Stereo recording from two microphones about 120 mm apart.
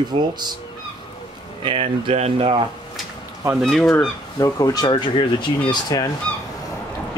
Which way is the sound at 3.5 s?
Centre (ahead or behind).